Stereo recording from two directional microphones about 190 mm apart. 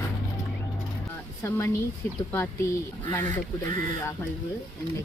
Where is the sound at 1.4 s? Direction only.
15° left (ahead or behind).